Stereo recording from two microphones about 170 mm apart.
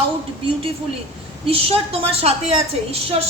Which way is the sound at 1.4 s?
35° right (ahead or behind).